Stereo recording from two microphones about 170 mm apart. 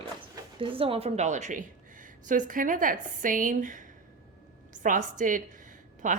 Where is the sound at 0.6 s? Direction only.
30° right (ahead or behind).